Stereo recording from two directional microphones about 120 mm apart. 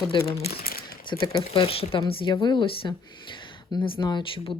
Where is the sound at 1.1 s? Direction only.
35° left (ahead or behind).